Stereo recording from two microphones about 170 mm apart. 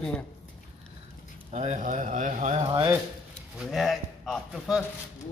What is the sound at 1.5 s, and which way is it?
Speech, 40° right (ahead or behind).